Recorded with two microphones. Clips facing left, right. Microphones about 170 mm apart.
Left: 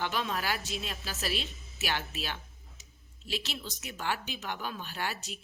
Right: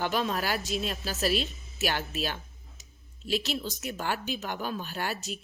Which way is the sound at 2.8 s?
45° right (ahead or behind).